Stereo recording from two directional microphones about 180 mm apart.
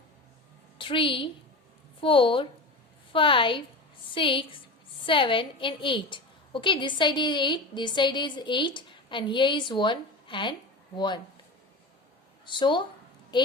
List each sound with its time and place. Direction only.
0.8 s a woman's voice: 30° left (ahead or behind)
12.5 s a woman's voice: 25° left (ahead or behind)
13.3 s a sound: 25° left (ahead or behind)